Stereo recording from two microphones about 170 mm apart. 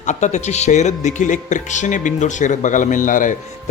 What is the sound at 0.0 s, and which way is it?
Speech, 45° left (ahead or behind).